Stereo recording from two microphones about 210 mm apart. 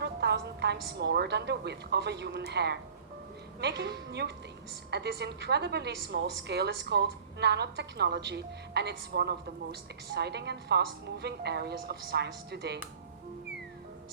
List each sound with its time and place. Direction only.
0.0 s a woman's voice: 50° right (ahead or behind)